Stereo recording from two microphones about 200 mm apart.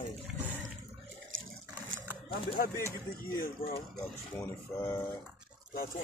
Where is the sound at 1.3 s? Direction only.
75° right (ahead or behind).